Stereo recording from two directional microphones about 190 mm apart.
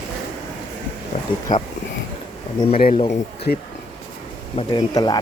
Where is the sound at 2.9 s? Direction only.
30° left (ahead or behind).